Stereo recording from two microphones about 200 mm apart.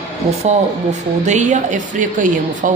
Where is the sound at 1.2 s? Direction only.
35° right (ahead or behind).